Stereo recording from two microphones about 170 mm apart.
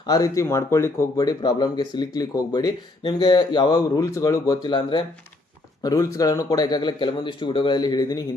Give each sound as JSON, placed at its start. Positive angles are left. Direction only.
{"t": 0.1, "sound": "speech", "side_deg": 20}